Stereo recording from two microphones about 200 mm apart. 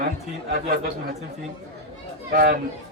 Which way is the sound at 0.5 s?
45° right (ahead or behind).